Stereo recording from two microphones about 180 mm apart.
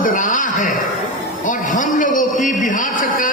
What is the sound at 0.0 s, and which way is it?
Chuckle, 45° left (ahead or behind).